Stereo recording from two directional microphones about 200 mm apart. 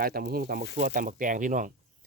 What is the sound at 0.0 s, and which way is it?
Speech, 50° right (ahead or behind).